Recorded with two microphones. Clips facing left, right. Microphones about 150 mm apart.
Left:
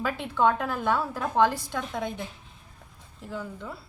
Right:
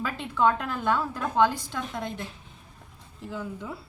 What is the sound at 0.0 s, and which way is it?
A woman's voice, 5° left (ahead or behind).